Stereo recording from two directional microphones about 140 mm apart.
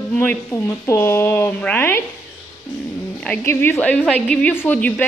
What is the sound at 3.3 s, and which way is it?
A woman's voice, 15° left (ahead or behind).